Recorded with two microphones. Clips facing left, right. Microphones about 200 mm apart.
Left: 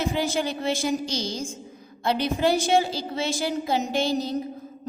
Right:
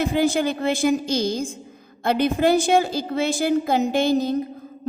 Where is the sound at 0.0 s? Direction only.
55° right (ahead or behind).